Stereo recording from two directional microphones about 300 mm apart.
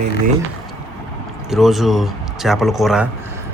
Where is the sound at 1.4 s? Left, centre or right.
Centre.